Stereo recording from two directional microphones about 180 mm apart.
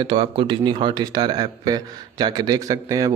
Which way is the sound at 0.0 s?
25° right (ahead or behind).